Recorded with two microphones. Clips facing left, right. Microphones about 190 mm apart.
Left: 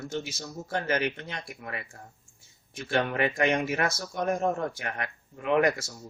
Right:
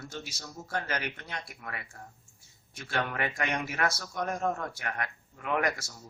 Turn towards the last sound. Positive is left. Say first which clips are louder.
# left 6 dB
turn(degrees=25)  # may be behind; listen again after turning